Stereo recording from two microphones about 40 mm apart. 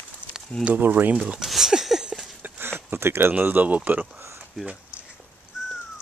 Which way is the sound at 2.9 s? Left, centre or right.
Right.